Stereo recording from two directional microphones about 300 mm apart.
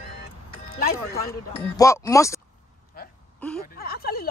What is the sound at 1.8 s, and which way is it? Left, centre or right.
Speech, centre.